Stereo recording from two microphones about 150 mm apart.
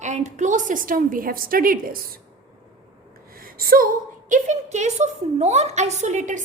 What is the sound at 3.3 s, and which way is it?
A woman's voice, 75° right (ahead or behind).